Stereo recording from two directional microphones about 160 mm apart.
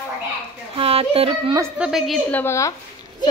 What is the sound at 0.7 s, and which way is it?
Speech, 35° right (ahead or behind).